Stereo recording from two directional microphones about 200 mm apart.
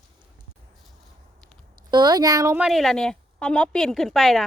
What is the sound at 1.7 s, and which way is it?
Speech, 20° right (ahead or behind).